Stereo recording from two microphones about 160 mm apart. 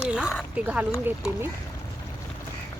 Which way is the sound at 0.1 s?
5° right (ahead or behind).